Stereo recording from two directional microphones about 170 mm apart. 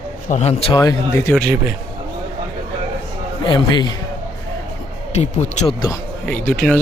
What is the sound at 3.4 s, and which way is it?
Speech, 25° left (ahead or behind).